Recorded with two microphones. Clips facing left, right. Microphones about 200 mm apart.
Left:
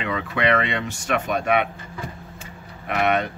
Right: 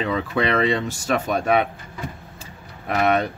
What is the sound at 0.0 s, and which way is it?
Speech, 35° right (ahead or behind).